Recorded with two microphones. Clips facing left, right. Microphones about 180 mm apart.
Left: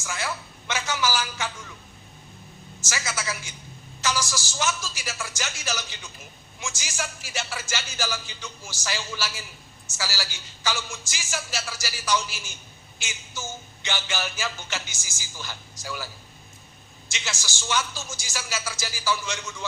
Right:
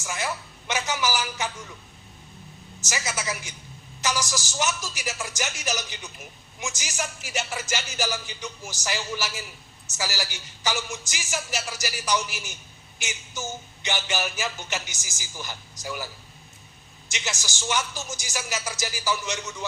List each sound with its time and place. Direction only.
0.0 s music: 15° right (ahead or behind)
2.8 s music: 15° right (ahead or behind)
17.1 s music: 20° right (ahead or behind)